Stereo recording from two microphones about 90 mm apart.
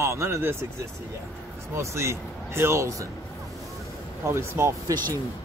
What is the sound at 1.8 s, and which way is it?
Speech, 30° right (ahead or behind).